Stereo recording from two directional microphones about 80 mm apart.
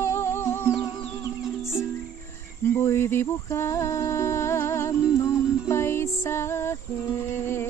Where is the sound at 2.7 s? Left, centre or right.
Left.